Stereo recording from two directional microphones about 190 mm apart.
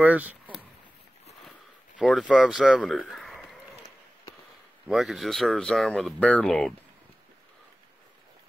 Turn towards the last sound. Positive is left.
turn(degrees=5)  # may be behind; listen again after turning